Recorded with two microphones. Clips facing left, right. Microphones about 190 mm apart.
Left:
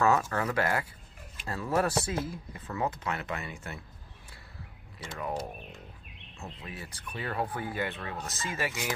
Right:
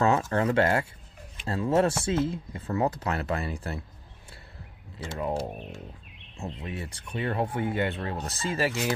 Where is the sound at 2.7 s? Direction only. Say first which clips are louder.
Right 5 dB; 35° right (ahead or behind).